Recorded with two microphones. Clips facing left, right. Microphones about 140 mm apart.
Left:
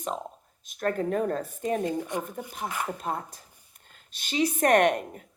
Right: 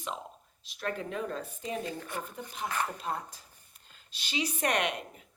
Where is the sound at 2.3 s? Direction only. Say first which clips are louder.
Left 3 dB; 45° left (ahead or behind).